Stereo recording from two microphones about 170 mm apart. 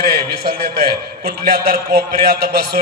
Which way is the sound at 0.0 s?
65° right (ahead or behind).